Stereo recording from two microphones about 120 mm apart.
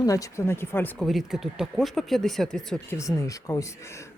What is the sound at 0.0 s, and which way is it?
Speech, 30° left (ahead or behind).